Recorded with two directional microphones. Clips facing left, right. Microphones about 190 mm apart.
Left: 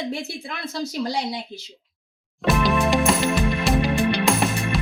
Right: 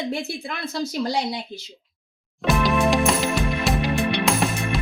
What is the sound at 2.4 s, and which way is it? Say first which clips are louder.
Music: even; centre (ahead or behind).